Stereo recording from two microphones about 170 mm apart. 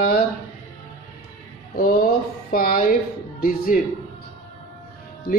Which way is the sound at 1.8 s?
55° left (ahead or behind).